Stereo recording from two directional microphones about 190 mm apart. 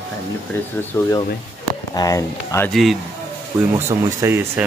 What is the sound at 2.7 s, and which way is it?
Speech, centre (ahead or behind).